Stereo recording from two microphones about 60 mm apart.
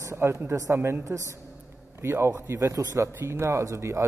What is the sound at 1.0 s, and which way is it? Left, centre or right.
Speech, right.